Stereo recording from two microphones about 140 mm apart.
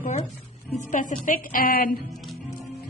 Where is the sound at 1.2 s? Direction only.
80° left.